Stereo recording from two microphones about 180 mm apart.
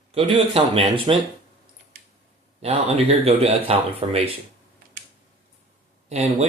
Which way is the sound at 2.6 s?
35° right (ahead or behind).